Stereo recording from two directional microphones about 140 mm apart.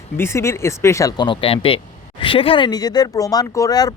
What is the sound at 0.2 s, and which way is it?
Speech, 20° left (ahead or behind).